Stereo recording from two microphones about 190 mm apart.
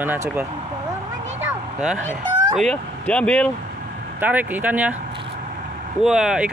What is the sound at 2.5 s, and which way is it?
Speech, 5° left (ahead or behind).